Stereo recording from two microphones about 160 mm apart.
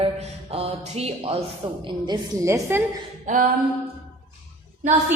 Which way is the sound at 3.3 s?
50° right (ahead or behind).